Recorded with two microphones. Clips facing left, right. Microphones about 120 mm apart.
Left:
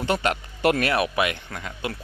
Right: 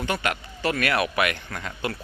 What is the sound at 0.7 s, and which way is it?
Speech, 25° left (ahead or behind).